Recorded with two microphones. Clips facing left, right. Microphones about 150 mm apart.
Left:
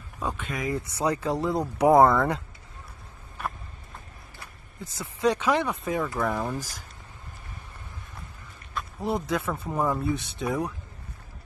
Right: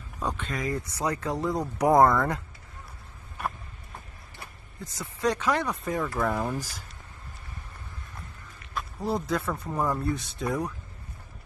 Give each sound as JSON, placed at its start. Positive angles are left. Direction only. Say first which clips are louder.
{"t": 0.2, "sound": "speech", "louder": "even", "side_deg": 5}
{"t": 4.9, "sound": "speech", "louder": "left 3 dB", "side_deg": 20}
{"t": 5.6, "sound": "speech", "louder": "left 2 dB", "side_deg": 0}
{"t": 9.0, "sound": "speech", "louder": "left 1 dB", "side_deg": 25}
{"t": 9.3, "sound": "speech", "louder": "left 1 dB", "side_deg": 0}